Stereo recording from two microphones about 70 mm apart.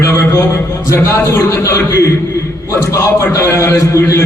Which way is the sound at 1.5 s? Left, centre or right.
Left.